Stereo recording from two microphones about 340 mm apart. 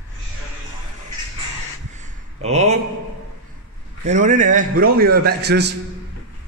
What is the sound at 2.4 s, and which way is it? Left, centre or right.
Speech, centre.